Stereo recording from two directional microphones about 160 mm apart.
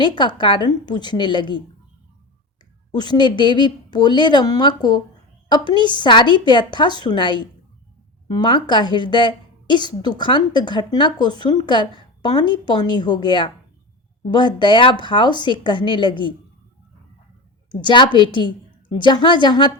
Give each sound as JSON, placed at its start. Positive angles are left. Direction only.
{"t": 0.0, "sound": "a woman's voice", "side_deg": 30}
{"t": 2.9, "sound": "a woman's voice", "side_deg": 25}
{"t": 17.7, "sound": "a woman's voice", "side_deg": 30}